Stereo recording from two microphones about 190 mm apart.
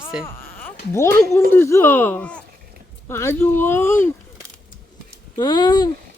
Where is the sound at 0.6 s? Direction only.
15° left (ahead or behind).